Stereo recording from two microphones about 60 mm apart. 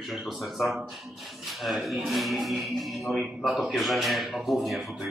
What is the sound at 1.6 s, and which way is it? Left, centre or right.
A man's voice, centre.